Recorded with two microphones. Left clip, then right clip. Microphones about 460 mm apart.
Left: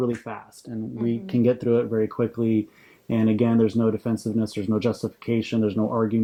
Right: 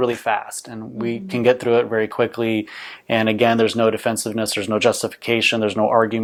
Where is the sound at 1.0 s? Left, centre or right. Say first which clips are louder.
Right 5 dB; right.